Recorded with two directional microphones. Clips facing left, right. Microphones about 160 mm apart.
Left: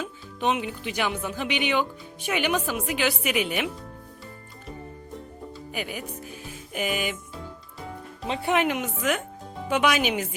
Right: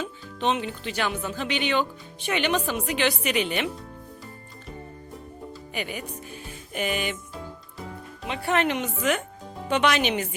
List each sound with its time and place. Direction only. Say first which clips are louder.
0.0 s speech: even; 10° left (ahead or behind)
5.7 s a woman's voice: right 1 dB; 5° left (ahead or behind)
8.3 s speech: left 1 dB; 20° left (ahead or behind)
8.6 s a woman's voice: right 1 dB; 5° left (ahead or behind)